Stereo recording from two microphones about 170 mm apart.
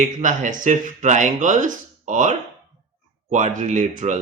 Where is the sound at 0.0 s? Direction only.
45° right (ahead or behind).